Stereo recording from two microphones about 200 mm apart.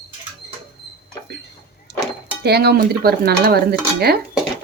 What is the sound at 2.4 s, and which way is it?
Cutlery, 55° right (ahead or behind).